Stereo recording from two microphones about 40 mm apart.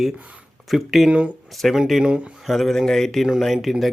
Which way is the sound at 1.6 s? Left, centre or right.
Centre.